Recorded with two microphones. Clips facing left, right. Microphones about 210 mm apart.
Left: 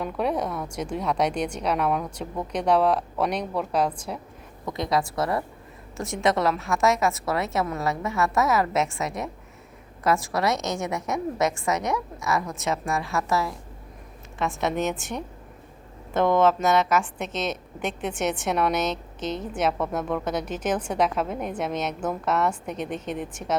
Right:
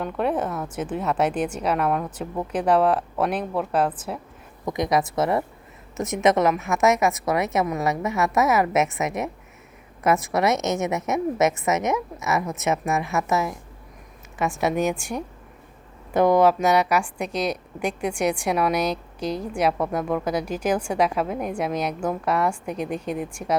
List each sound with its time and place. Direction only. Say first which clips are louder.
0.0 s a woman's voice: right 2 dB; centre (ahead or behind)
4.6 s a woman's voice: right 3 dB; 20° right (ahead or behind)
14.5 s a woman's voice: right 3 dB; centre (ahead or behind)
16.1 s a woman's voice: right 3 dB; 15° right (ahead or behind)